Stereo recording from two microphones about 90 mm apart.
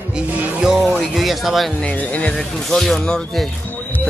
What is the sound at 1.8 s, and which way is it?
Speech, 15° left (ahead or behind).